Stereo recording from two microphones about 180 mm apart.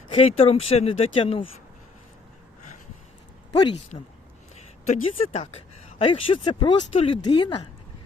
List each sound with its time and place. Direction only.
0.1 s speech: 35° left (ahead or behind)
3.5 s speech: 20° left (ahead or behind)
5.1 s speech: 35° left (ahead or behind)